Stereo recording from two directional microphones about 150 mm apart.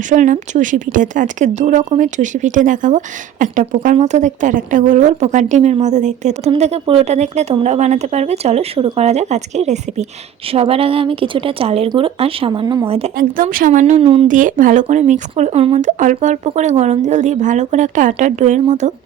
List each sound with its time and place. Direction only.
0.1 s a woman's voice: 55° right (ahead or behind); by 12.8 s 30° right (ahead or behind)
13.7 s speech: 50° right (ahead or behind)
14.0 s a woman's voice: 40° right (ahead or behind)
14.3 s speech: 60° right (ahead or behind)